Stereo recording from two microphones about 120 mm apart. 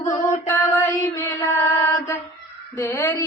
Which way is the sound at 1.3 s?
20° left (ahead or behind).